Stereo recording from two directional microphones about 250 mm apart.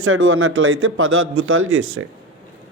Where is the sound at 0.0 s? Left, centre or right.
Right.